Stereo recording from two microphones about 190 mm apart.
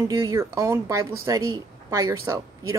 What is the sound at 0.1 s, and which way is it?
A woman's voice, 15° right (ahead or behind).